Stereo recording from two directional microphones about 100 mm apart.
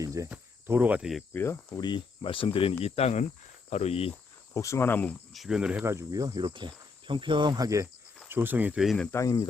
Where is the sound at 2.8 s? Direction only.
90° left.